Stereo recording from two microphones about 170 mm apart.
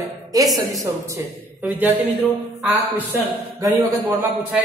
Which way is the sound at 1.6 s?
10° right (ahead or behind).